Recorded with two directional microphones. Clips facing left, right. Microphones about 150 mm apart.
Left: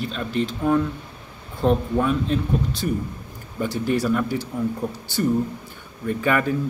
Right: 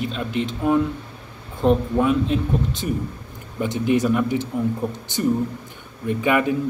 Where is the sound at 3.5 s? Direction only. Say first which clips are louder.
Right 1 dB; 20° right (ahead or behind).